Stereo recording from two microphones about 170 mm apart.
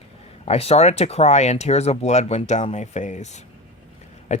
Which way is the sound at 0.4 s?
40° left (ahead or behind).